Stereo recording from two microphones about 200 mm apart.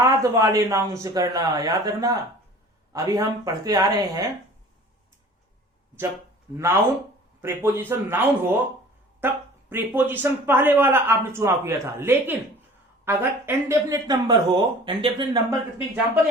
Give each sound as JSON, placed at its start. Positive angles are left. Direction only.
{"t": 0.0, "sound": "a man's voice", "side_deg": -15}
{"t": 7.4, "sound": "a man's voice", "side_deg": -10}